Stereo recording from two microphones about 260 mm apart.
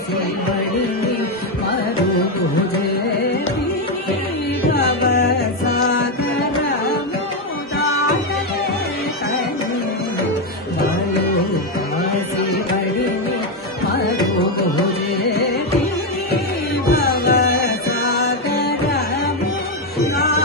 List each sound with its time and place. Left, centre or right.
4.7 s music: left
16.8 s music: left
20.2 s music: left